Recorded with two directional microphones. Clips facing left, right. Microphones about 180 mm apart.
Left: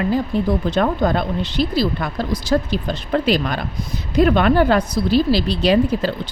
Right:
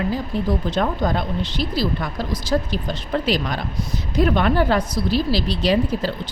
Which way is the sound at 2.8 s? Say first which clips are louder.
Left 3 dB; 60° left (ahead or behind).